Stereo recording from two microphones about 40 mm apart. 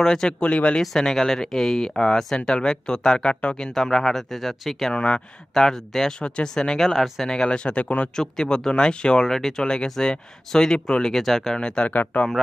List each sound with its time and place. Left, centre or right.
0.0 s speech: centre
0.4 s speech: left
0.7 s speech: centre
4.9 s speech: left
6.9 s speech: centre
7.2 s speech: centre
8.2 s speech: centre
9.3 s speech: centre
11.5 s speech: centre
11.9 s speech: left